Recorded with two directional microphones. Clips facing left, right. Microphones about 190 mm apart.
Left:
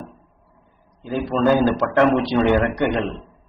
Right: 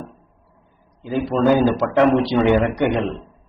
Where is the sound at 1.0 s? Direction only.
15° right (ahead or behind).